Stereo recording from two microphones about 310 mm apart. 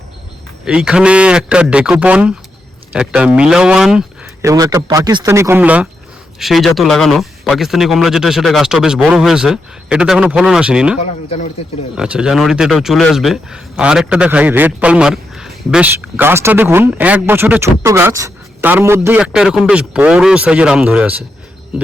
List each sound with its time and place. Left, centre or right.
0.6 s speech: centre
11.0 s speech: left
11.9 s speech: centre